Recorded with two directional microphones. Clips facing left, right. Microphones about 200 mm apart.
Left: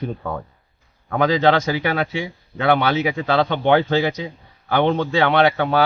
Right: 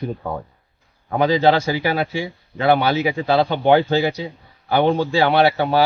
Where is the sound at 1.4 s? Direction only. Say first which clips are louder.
Right 1 dB; 30° right (ahead or behind).